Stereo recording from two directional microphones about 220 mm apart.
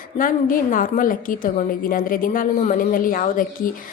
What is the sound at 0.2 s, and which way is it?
A woman's voice, 40° left (ahead or behind).